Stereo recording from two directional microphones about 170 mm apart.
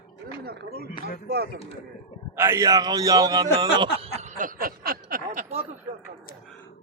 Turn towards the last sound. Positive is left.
turn(degrees=-35)  # may be behind; listen again after turning